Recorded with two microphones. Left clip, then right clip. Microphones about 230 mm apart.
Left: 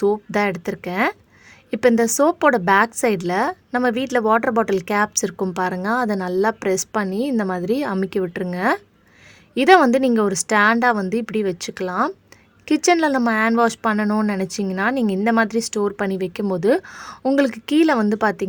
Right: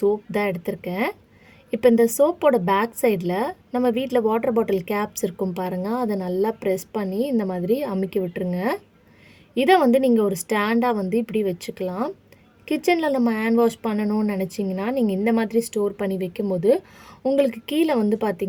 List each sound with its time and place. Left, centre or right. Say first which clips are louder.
0.3 s speech: left 3 dB; left